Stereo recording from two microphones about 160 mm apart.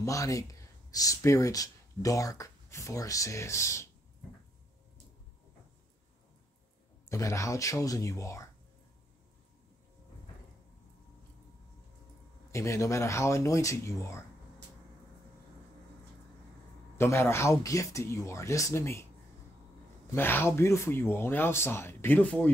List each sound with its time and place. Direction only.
0.0 s speech: 20° left (ahead or behind)
7.1 s speech: 20° left (ahead or behind)
12.4 s speech: 20° left (ahead or behind)
16.9 s speech: 15° left (ahead or behind)
20.1 s speech: 15° left (ahead or behind)